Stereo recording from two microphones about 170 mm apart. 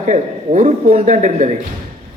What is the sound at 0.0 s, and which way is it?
A man's voice, 50° right (ahead or behind).